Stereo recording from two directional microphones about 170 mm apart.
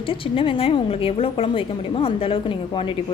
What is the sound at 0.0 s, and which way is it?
A woman's voice, 30° left (ahead or behind).